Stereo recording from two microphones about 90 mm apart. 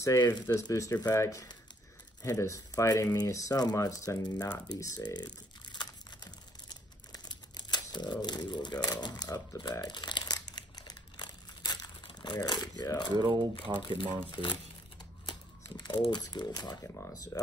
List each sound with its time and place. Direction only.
0.0 s speech: 35° left (ahead or behind)
5.0 s a sound: 55° left (ahead or behind)
6.7 s crumpling: 50° left (ahead or behind)
13.7 s speech: 65° left (ahead or behind)
15.8 s speech: 55° left (ahead or behind)